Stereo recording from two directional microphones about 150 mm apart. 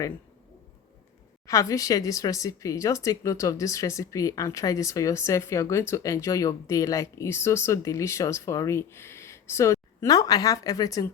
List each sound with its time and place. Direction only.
1.5 s speech: 20° left (ahead or behind)